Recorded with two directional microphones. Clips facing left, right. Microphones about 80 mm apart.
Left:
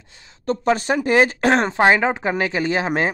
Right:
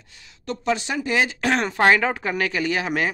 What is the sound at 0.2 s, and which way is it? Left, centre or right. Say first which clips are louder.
Speech: left 7 dB; left.